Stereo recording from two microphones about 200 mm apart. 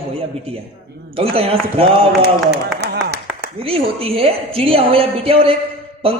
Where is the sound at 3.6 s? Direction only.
30° right (ahead or behind).